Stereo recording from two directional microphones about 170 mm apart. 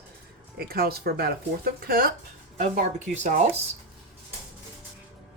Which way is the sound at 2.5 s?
45° right (ahead or behind).